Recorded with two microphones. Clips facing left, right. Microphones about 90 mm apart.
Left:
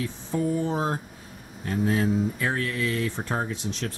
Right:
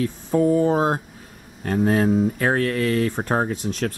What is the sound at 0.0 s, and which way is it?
Speech, 50° right (ahead or behind).